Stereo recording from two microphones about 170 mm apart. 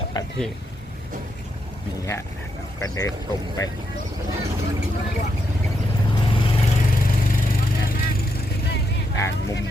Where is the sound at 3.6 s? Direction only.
20° left (ahead or behind).